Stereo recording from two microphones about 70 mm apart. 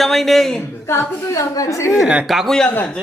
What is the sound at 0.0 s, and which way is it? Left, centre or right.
Speech, centre.